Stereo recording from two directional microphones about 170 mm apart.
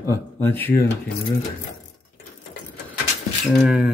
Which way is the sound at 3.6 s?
5° right (ahead or behind).